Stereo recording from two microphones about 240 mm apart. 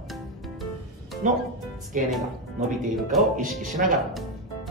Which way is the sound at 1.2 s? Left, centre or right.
Right.